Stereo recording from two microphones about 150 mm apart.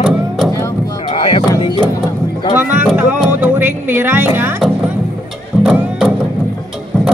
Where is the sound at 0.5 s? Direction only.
25° left (ahead or behind).